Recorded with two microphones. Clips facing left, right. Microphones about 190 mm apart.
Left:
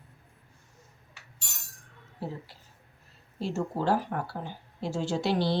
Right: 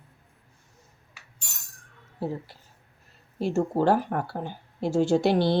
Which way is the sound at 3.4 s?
55° right (ahead or behind).